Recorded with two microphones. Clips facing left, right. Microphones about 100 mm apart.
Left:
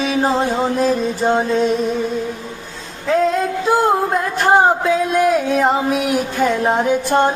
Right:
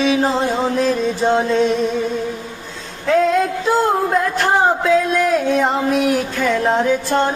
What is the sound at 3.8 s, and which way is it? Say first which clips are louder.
Music: right 1 dB; 10° left (ahead or behind).